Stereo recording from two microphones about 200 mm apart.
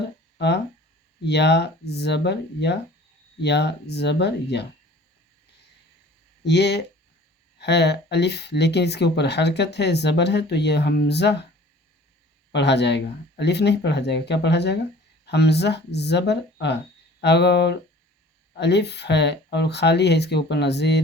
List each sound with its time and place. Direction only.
0.3 s speech: 55° left (ahead or behind)
6.4 s speech: 55° left (ahead or behind)
12.5 s speech: 60° left (ahead or behind)